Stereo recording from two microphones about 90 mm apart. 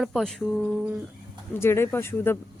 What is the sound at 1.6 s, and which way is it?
Speech, 25° left (ahead or behind).